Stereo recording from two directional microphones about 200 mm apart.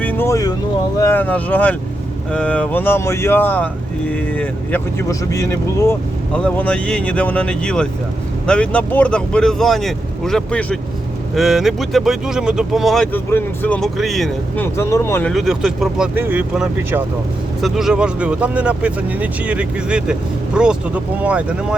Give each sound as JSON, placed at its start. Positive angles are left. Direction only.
{"t": 0.0, "sound": "vehicle", "side_deg": 10}
{"t": 0.9, "sound": "speech", "side_deg": 10}
{"t": 15.3, "sound": "speech", "side_deg": 0}